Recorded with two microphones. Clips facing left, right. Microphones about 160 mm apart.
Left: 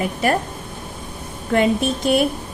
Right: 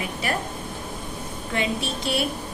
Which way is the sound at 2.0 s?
50° left (ahead or behind).